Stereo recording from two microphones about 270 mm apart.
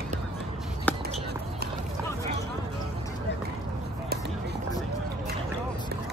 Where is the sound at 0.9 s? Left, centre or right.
Centre.